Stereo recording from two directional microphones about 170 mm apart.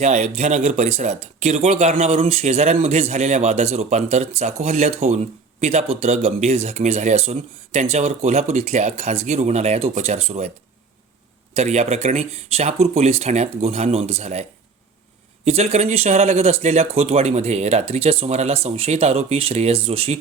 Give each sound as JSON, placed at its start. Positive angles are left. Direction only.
{"t": 0.0, "sound": "speech", "side_deg": -45}
{"t": 11.5, "sound": "speech", "side_deg": -40}
{"t": 15.4, "sound": "speech", "side_deg": -40}